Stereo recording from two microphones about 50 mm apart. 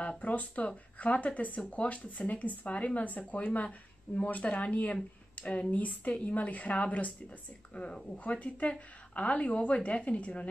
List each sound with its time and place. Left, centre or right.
0.2 s speech: left
7.7 s speech: centre